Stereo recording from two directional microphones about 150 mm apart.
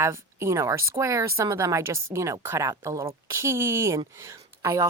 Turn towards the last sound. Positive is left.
turn(degrees=-20)  # may be behind; listen again after turning